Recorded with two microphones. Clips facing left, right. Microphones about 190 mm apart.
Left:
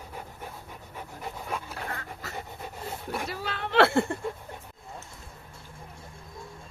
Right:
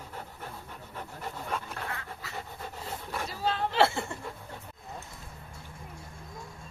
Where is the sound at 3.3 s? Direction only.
65° left (ahead or behind).